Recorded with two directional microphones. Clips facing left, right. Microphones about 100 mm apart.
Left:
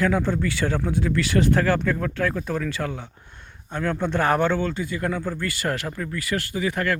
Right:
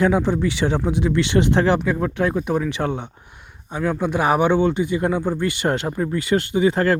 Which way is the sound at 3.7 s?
5° right (ahead or behind).